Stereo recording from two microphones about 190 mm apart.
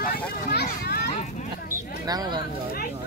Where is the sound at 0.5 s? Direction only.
60° left (ahead or behind).